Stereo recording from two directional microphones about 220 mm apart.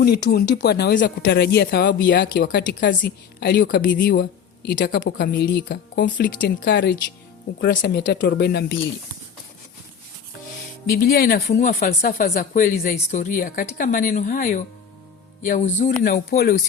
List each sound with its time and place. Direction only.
0.0 s speech: 45° left (ahead or behind)
10.9 s speech: 40° left (ahead or behind)